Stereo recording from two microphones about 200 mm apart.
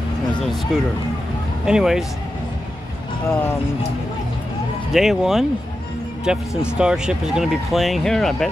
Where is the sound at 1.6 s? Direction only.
5° right (ahead or behind).